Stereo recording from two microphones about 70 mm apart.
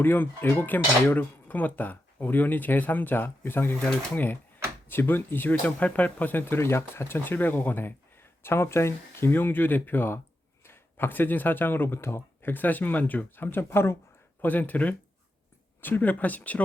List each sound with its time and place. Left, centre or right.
0.0 s speech: left
14.4 s speech: left